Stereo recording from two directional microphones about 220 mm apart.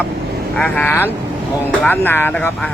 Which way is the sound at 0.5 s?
5° left (ahead or behind).